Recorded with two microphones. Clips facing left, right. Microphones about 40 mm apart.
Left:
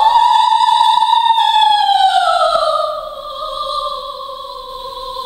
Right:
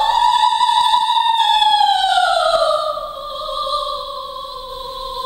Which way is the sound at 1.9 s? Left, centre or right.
Centre.